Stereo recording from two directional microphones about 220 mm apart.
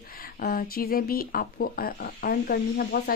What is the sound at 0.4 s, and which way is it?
Speech, 40° left (ahead or behind).